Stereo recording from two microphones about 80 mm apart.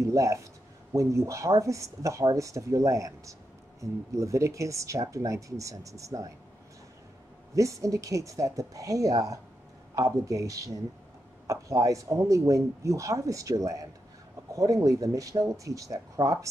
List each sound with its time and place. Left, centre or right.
0.0 s speech: right
7.5 s speech: right